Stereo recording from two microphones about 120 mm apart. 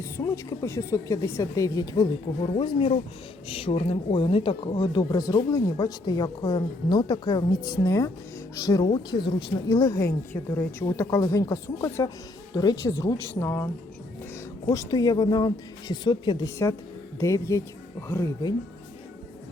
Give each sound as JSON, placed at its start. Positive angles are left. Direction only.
{"t": 0.0, "sound": "speech", "side_deg": 25}
{"t": 14.7, "sound": "speech", "side_deg": 30}
{"t": 17.2, "sound": "speech", "side_deg": 25}